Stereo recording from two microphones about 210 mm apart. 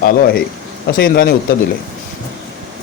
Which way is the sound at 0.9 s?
45° left (ahead or behind).